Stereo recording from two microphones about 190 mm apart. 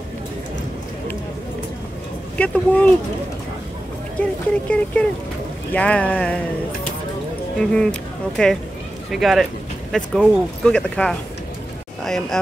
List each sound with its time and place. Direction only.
2.3 s speech: 5° left (ahead or behind)
4.2 s speech: 5° left (ahead or behind)
7.5 s speech: 5° left (ahead or behind)